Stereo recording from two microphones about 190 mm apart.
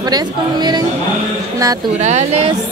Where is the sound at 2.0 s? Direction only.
35° right (ahead or behind).